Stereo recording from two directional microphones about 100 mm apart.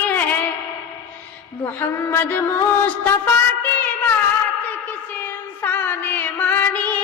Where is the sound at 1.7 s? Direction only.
25° left (ahead or behind).